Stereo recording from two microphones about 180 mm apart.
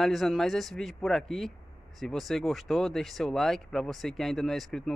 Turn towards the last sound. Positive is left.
turn(degrees=0)  # may be behind; listen again after turning